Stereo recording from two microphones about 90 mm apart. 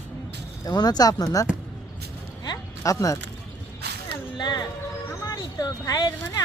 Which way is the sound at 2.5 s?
40° left (ahead or behind).